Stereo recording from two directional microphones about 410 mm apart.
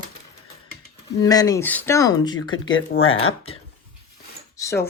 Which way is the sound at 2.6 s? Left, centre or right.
Left.